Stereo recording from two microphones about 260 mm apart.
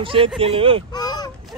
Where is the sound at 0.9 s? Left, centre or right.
Centre.